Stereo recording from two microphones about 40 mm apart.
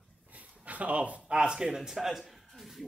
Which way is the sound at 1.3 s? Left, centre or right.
Right.